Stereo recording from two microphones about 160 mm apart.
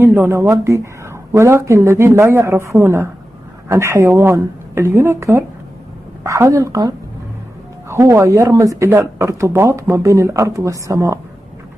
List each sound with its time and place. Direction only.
0.0 s a woman's voice: 15° right (ahead or behind)
7.9 s speech: 20° right (ahead or behind)